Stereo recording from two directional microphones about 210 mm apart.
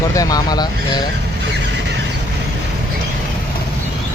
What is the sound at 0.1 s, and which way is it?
Speech, 15° left (ahead or behind).